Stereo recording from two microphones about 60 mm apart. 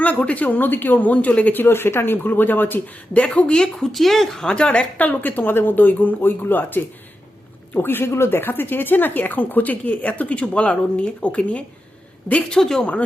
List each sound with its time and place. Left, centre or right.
0.0 s a woman's voice: left
1.6 s speech: left
3.5 s a woman's voice: centre